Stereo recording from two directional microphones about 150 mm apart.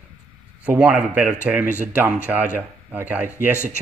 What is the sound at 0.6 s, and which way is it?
Speech, 10° right (ahead or behind).